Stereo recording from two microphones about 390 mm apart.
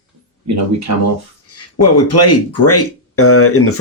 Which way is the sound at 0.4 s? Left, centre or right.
Right.